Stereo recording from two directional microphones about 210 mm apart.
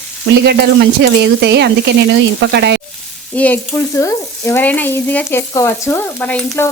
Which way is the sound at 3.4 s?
10° left (ahead or behind).